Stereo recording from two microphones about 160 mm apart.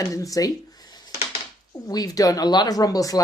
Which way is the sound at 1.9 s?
20° left (ahead or behind).